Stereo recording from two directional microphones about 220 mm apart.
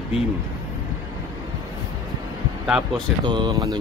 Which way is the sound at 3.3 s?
20° right (ahead or behind).